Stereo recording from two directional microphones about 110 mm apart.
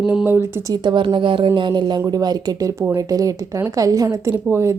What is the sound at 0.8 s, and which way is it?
Speech, 45° right (ahead or behind).